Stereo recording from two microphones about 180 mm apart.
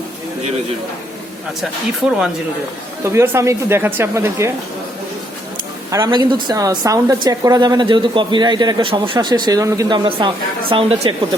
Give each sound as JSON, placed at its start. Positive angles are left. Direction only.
{"t": 2.0, "sound": "speech", "side_deg": -5}
{"t": 5.9, "sound": "speech", "side_deg": -20}